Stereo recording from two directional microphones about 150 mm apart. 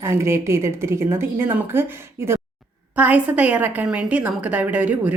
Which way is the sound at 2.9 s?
10° right (ahead or behind).